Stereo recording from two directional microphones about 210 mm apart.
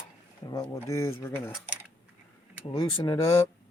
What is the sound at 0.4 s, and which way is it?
Speech, 15° left (ahead or behind).